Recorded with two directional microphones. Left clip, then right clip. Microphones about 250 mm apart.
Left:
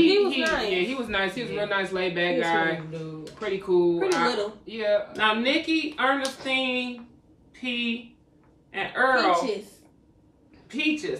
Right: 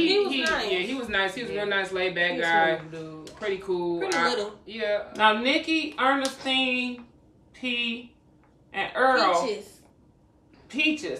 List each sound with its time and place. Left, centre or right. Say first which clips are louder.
0.0 s a sound: left 2 dB; centre
1.1 s a man's voice: right 3 dB; centre
5.1 s a woman's voice: right 2 dB; centre
9.3 s speech: left 1 dB; centre
10.7 s speech: right 1 dB; centre